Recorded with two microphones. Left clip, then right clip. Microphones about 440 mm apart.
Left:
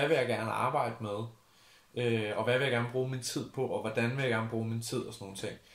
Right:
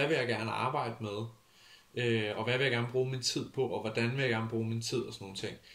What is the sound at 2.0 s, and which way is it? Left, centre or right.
Speech, centre.